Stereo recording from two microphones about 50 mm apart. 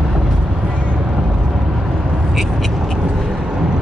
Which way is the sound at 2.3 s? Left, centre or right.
Centre.